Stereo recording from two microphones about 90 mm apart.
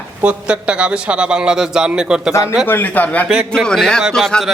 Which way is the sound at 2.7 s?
20° left (ahead or behind).